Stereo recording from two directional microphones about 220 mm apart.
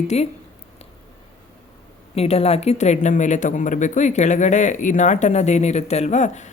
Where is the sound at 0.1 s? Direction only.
30° left (ahead or behind).